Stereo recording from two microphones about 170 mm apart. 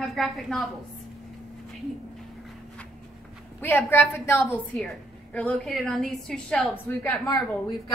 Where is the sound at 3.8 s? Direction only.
15° left (ahead or behind).